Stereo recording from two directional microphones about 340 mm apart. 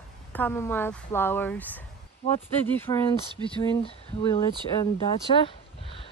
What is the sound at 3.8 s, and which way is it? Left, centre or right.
Speech, centre.